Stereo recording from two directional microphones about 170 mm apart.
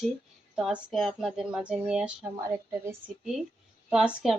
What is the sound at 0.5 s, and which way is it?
Speech, centre (ahead or behind).